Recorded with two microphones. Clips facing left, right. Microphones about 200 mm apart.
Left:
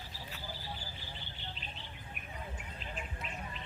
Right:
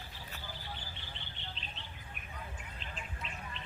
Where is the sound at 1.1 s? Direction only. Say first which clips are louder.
Left 1 dB; 5° left (ahead or behind).